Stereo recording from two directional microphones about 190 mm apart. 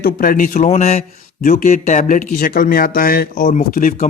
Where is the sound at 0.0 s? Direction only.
50° left (ahead or behind).